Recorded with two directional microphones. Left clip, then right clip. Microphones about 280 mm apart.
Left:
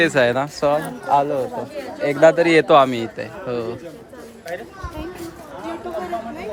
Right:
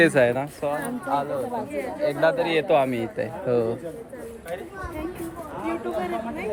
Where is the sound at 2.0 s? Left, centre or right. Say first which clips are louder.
Left 8 dB; left.